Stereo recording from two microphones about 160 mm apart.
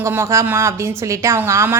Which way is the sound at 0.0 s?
15° right (ahead or behind).